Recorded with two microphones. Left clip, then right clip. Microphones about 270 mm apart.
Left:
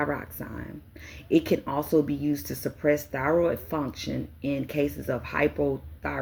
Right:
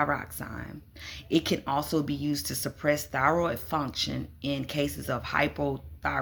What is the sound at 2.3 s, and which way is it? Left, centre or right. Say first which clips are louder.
Speech: left 1 dB; right.